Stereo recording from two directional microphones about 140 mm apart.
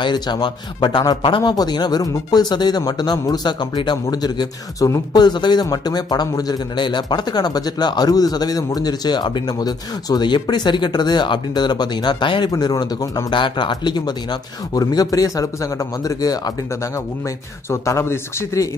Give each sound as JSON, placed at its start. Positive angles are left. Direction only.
{"t": 0.0, "sound": "a man's voice", "side_deg": 30}
{"t": 17.6, "sound": "a man's voice", "side_deg": 20}